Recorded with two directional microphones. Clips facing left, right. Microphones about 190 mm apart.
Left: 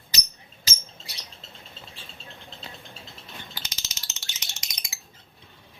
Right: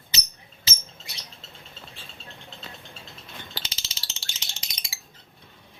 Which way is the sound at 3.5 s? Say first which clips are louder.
Right 2 dB; 30° right (ahead or behind).